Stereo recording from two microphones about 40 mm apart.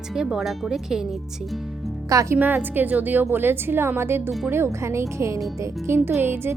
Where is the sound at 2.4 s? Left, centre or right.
Right.